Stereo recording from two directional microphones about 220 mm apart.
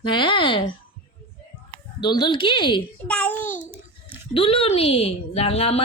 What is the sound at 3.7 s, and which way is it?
Babbling, 10° right (ahead or behind).